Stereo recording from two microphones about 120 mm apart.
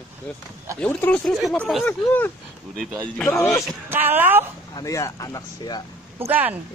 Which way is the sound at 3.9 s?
15° right (ahead or behind).